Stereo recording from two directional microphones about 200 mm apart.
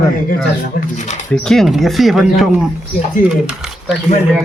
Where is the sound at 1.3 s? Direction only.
Centre (ahead or behind).